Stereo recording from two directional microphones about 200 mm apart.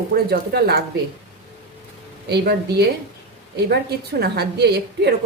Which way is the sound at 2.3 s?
55° right (ahead or behind).